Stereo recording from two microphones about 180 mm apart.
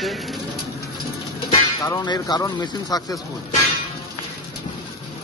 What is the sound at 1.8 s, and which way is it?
Music, 20° left (ahead or behind).